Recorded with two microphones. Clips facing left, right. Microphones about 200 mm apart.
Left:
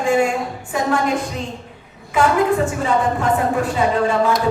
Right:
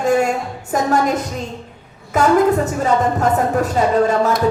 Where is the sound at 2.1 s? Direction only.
40° right (ahead or behind).